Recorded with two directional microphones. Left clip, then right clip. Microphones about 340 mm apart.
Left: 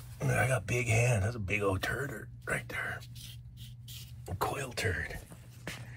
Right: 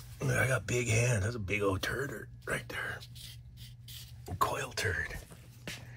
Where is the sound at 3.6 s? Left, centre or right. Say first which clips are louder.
Even; right.